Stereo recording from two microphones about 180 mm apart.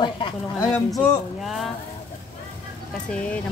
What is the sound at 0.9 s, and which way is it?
Speech, centre (ahead or behind).